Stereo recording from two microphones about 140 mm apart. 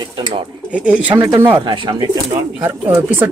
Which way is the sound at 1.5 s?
35° right (ahead or behind).